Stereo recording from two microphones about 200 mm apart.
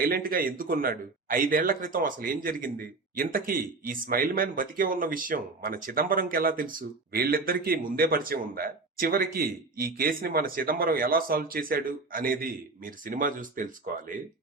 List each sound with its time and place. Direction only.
0.1 s a man's voice: 45° right (ahead or behind)